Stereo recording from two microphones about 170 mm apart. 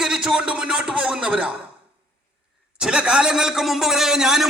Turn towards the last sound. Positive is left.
turn(degrees=-5)  # may be behind; listen again after turning